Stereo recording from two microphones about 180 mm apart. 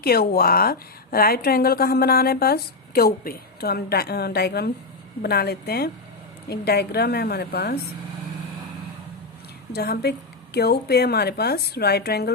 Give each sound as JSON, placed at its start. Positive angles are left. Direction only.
{"t": 0.0, "sound": "speech", "side_deg": 55}
{"t": 9.7, "sound": "speech", "side_deg": 60}